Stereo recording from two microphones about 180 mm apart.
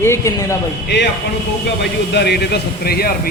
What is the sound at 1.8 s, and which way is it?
A man's voice, 70° left (ahead or behind).